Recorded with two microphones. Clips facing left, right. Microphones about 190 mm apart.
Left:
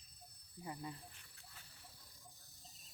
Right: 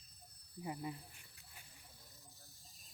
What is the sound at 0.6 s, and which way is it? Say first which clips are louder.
Speech: right 4 dB; 20° right (ahead or behind).